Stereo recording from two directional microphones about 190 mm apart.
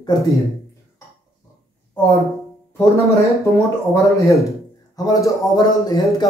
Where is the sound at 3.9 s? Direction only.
15° left (ahead or behind).